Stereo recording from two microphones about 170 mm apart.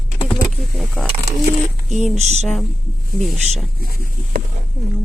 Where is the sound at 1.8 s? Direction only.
45° right (ahead or behind).